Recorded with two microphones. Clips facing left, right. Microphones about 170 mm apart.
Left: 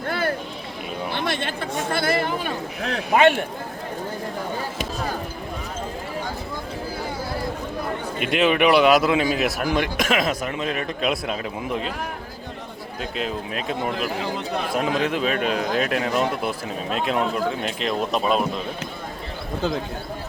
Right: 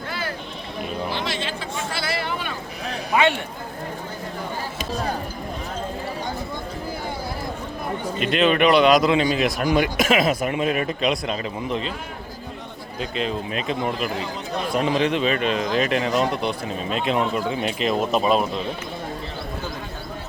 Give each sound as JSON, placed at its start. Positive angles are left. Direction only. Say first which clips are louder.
{"t": 0.1, "sound": "sheep", "louder": "left 7 dB", "side_deg": 55}
{"t": 1.1, "sound": "chatter", "louder": "left 1 dB", "side_deg": 55}
{"t": 8.2, "sound": "a man's voice", "louder": "even", "side_deg": 10}
{"t": 11.0, "sound": "speech", "louder": "right 1 dB", "side_deg": 5}
{"t": 13.0, "sound": "speech", "louder": "right 2 dB", "side_deg": 5}